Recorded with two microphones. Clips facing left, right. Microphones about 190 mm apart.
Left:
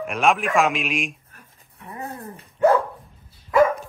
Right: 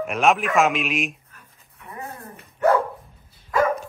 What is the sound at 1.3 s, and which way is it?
Dog, 35° left (ahead or behind).